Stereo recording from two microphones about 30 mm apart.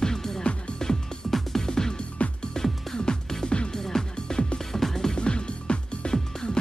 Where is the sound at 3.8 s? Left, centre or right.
Centre.